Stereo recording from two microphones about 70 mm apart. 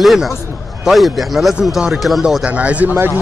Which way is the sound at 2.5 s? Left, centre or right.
Centre.